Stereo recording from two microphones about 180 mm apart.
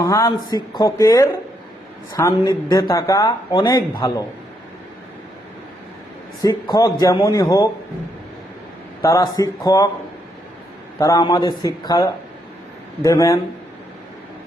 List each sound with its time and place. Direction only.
0.0 s speech: 20° left (ahead or behind)
6.4 s speech: 20° left (ahead or behind)
9.0 s speech: 20° left (ahead or behind)
11.0 s a man's voice: 20° left (ahead or behind)